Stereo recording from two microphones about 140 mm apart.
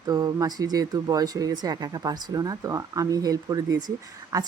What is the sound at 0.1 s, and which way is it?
Speech, 30° right (ahead or behind).